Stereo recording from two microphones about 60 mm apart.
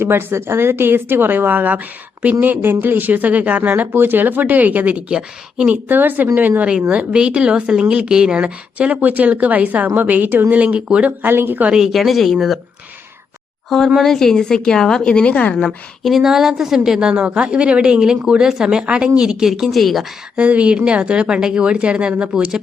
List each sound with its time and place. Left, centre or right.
0.0 s a woman's voice: right
5.9 s a woman's voice: right
6.6 s a woman's voice: centre; by 11.7 s right
11.7 s speech: centre
13.7 s a woman's voice: centre; by 15.5 s left
15.5 s a woman's voice: centre
20.3 s a woman's voice: right